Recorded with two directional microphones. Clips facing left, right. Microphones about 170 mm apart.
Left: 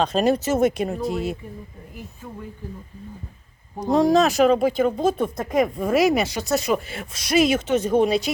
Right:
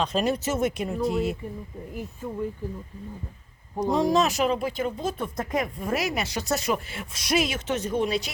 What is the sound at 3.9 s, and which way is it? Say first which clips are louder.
Speech: left 5 dB; 40° left (ahead or behind).